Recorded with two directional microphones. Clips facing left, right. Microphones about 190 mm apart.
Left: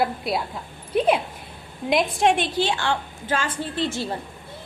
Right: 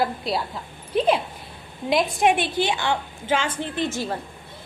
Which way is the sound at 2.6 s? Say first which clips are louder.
Even; 15° right (ahead or behind).